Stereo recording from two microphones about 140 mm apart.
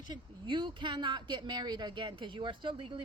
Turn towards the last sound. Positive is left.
turn(degrees=-35)  # may be behind; listen again after turning